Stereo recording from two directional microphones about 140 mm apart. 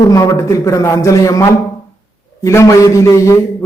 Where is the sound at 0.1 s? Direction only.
25° left (ahead or behind).